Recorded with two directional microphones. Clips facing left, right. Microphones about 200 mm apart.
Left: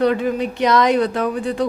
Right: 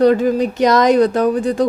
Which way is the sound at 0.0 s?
40° right (ahead or behind).